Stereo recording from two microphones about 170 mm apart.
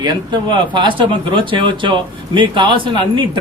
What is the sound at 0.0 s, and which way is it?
Speech, 25° right (ahead or behind).